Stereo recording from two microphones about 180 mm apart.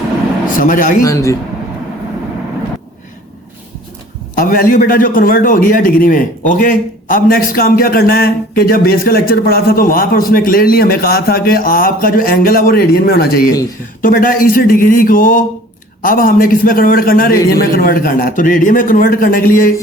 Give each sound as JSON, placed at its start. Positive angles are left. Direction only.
{"t": 0.6, "sound": "a man's voice", "side_deg": 50}
{"t": 1.0, "sound": "a man's voice", "side_deg": 15}
{"t": 4.4, "sound": "a man's voice", "side_deg": 50}